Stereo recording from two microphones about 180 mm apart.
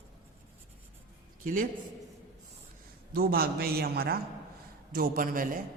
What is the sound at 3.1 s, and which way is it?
A man's voice, 60° right (ahead or behind).